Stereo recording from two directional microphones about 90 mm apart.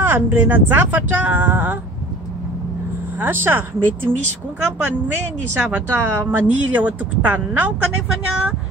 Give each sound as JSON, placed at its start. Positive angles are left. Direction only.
{"t": 0.0, "sound": "a woman's voice", "side_deg": -25}
{"t": 3.2, "sound": "a woman's voice", "side_deg": -25}